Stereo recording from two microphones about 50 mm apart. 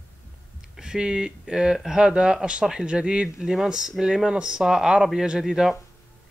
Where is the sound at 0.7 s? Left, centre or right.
Centre.